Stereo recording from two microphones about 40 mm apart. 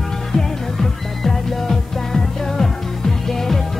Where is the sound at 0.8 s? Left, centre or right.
Centre.